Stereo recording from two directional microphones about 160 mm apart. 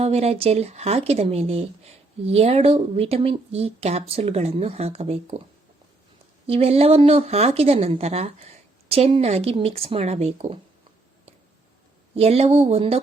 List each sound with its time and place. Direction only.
0.0 s speech: 40° right (ahead or behind)
6.5 s speech: 40° right (ahead or behind)
12.1 s speech: 40° right (ahead or behind)